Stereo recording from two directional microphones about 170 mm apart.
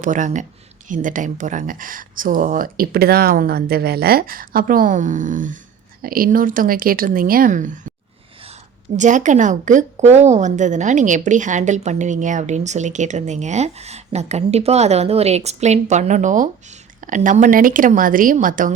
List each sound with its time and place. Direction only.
0.0 s a woman's voice: 50° right (ahead or behind)
9.0 s a woman's voice: 45° right (ahead or behind)